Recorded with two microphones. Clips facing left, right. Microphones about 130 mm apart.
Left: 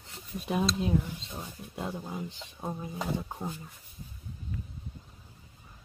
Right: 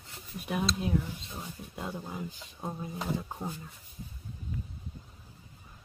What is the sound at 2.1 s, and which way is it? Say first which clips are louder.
Speech: left 1 dB; 25° left (ahead or behind).